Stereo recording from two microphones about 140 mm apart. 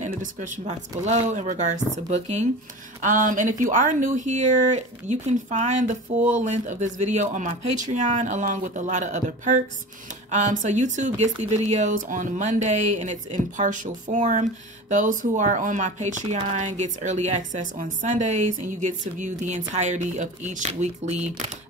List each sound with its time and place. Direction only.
0.0 s speech: 65° right (ahead or behind)
3.0 s speech: 70° right (ahead or behind)